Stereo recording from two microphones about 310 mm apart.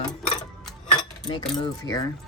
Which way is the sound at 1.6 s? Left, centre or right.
Centre.